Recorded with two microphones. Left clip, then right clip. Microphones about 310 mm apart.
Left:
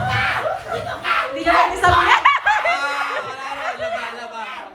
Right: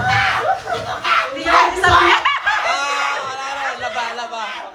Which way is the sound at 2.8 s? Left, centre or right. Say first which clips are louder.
Right 3 dB; centre.